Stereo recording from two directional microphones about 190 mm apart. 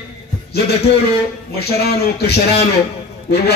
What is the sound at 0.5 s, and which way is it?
Speech, 60° left (ahead or behind).